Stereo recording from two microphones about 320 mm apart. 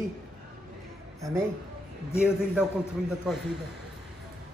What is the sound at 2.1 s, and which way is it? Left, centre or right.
Speech, centre.